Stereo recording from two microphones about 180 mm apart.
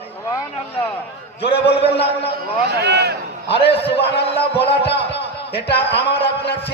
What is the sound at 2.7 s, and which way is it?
Speech, 65° right (ahead or behind).